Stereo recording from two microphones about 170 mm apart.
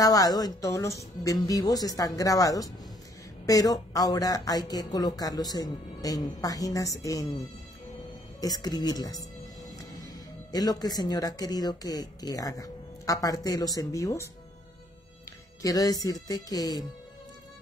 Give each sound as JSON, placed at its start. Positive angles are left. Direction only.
{"t": 0.0, "sound": "speech", "side_deg": 20}
{"t": 8.4, "sound": "speech", "side_deg": 20}
{"t": 9.4, "sound": "music", "side_deg": 0}
{"t": 9.8, "sound": "speech", "side_deg": 20}
{"t": 15.6, "sound": "speech", "side_deg": 20}